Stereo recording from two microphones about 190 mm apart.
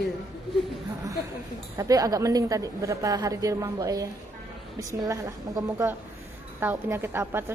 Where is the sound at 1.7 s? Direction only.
20° right (ahead or behind).